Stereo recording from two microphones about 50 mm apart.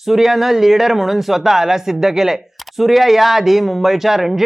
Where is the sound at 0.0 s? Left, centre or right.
Centre.